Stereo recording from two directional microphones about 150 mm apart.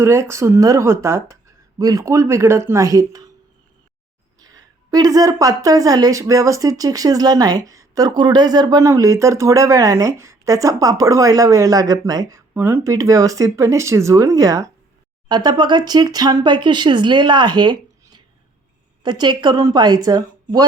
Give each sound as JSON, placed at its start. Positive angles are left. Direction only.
{"t": 0.0, "sound": "a woman's voice", "side_deg": -15}
{"t": 4.4, "sound": "a woman's voice", "side_deg": -25}